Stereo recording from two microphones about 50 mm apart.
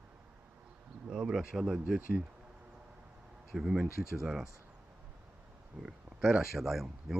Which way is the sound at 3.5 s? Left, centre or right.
Centre.